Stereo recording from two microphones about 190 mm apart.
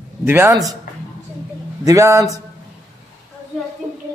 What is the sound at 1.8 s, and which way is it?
Speech, 15° right (ahead or behind).